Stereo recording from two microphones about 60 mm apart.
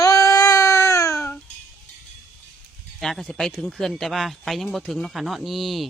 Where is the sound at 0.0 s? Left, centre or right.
Left.